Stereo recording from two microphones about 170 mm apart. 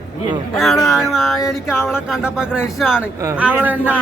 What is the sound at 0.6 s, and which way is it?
Speech, centre (ahead or behind).